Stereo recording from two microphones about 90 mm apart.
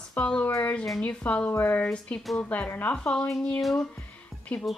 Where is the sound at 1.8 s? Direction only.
10° left (ahead or behind).